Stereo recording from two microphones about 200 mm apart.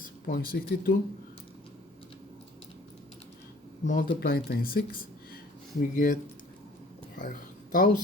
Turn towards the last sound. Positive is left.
turn(degrees=45)  # may be behind; listen again after turning